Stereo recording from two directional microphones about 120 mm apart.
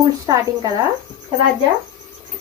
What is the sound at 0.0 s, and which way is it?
Speech, 30° right (ahead or behind).